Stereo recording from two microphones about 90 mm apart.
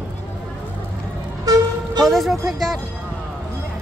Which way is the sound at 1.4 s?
40° right (ahead or behind).